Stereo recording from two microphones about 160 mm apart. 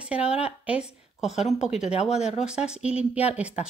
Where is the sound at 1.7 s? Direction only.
40° left (ahead or behind).